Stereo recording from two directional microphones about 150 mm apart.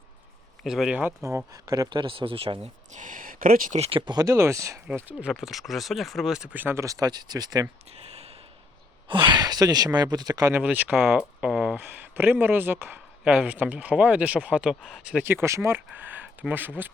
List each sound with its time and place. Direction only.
0.6 s speech: 5° right (ahead or behind); by 2.6 s 35° right (ahead or behind)
2.9 s speech: 60° right (ahead or behind)
3.8 s speech: 40° right (ahead or behind); by 5.3 s 10° right (ahead or behind)
5.3 s speech: centre (ahead or behind); by 7.7 s 25° right (ahead or behind)
7.9 s a sound: 45° right (ahead or behind)
9.0 s speech: 30° right (ahead or behind)
10.5 s speech: 10° right (ahead or behind)